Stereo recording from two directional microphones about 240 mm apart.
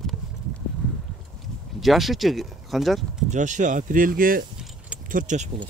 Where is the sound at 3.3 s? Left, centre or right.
Right.